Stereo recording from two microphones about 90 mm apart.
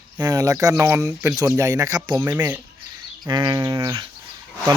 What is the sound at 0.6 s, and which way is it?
Speech, 30° right (ahead or behind).